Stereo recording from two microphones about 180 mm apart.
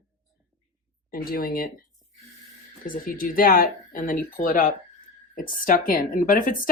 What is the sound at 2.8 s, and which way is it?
A woman's voice, 50° left (ahead or behind).